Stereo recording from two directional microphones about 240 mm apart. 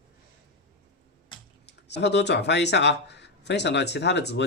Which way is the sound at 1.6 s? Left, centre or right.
Left.